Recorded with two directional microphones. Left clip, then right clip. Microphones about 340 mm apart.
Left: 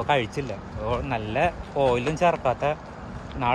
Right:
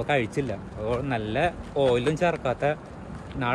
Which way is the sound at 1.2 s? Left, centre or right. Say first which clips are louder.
Left 2 dB; centre.